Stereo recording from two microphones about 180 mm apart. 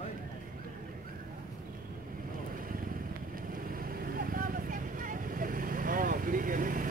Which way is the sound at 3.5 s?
50° right (ahead or behind).